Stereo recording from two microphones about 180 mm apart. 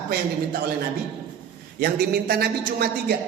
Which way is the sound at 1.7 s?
65° right (ahead or behind).